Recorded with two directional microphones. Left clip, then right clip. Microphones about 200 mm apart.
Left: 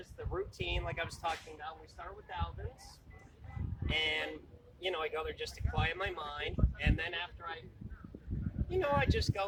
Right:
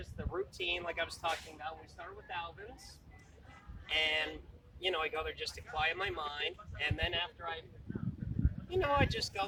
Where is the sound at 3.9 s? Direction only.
25° right (ahead or behind).